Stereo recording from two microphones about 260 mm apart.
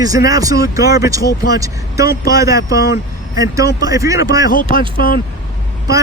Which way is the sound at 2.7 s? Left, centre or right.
Left.